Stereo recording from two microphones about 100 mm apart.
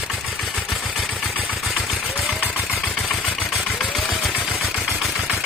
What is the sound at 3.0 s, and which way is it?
Vehicle, 5° left (ahead or behind).